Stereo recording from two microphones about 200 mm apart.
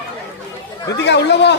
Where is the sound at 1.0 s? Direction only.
60° left (ahead or behind).